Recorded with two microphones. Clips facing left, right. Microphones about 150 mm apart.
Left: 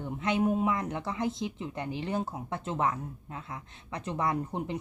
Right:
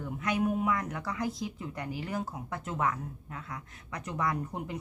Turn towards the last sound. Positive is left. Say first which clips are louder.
# left 3 dB
turn(degrees=25)  # may be behind; listen again after turning